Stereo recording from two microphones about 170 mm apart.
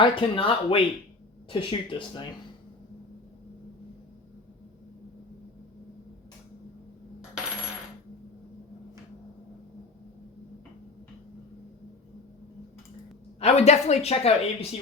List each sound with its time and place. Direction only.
0.0 s speech: 30° left (ahead or behind)
13.4 s speech: 40° left (ahead or behind)